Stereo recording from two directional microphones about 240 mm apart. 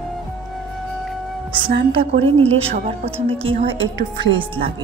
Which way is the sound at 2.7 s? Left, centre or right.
Right.